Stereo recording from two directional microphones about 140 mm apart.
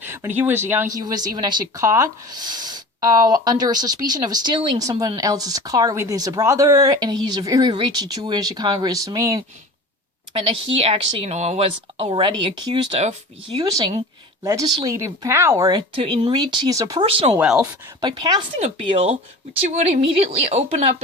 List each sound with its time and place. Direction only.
0.0 s speech: 15° right (ahead or behind)
0.9 s speech: 25° right (ahead or behind)
4.8 s speech: 25° right (ahead or behind)
10.3 s speech: 45° right (ahead or behind); by 15.8 s 20° right (ahead or behind)
16.0 s speech: 35° right (ahead or behind)
17.3 s speech: 5° right (ahead or behind)
18.0 s speech: 30° right (ahead or behind)
18.6 s speech: 40° right (ahead or behind)
19.6 s speech: 50° right (ahead or behind)